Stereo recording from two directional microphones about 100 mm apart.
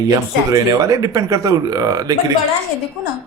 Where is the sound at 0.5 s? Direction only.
35° right (ahead or behind).